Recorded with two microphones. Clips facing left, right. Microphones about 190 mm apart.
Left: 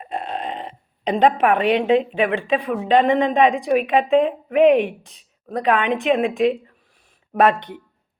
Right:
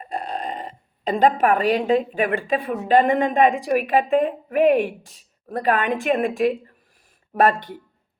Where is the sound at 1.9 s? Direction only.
50° right (ahead or behind).